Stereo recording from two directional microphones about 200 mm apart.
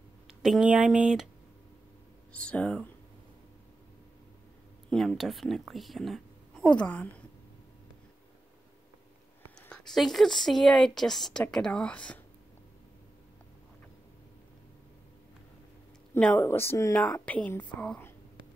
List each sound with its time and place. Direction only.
0.3 s a woman's voice: 5° right (ahead or behind)
2.3 s a woman's voice: 5° left (ahead or behind)
4.8 s a woman's voice: centre (ahead or behind)
9.6 s a woman's voice: 5° left (ahead or behind)
16.2 s speech: 10° left (ahead or behind)